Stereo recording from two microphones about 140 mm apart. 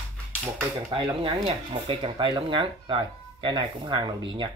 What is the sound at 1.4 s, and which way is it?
Speech, 40° right (ahead or behind).